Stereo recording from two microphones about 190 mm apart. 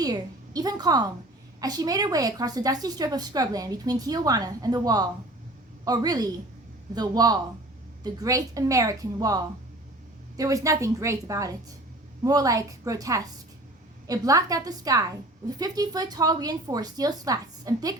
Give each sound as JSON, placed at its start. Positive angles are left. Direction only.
{"t": 0.0, "sound": "a woman's voice", "side_deg": -20}